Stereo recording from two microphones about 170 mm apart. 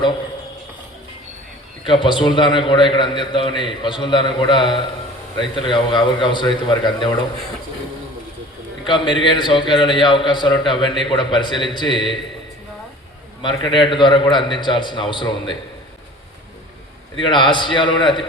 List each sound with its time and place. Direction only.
1.9 s a man's voice: 30° left (ahead or behind)
8.9 s a man's voice: 30° left (ahead or behind)
13.4 s a man's voice: 30° left (ahead or behind)
17.2 s a man's voice: 30° left (ahead or behind)